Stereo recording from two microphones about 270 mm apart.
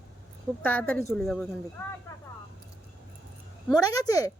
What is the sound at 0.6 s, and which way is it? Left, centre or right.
Speech, centre.